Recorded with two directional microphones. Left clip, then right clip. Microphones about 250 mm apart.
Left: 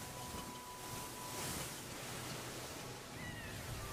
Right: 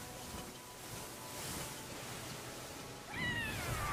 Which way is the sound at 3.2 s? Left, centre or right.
Centre.